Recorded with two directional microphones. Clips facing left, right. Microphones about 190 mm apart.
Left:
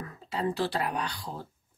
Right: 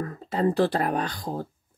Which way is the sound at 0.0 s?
45° right (ahead or behind).